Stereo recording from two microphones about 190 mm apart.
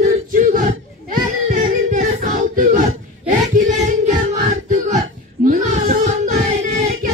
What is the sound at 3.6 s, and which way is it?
Music, 40° right (ahead or behind).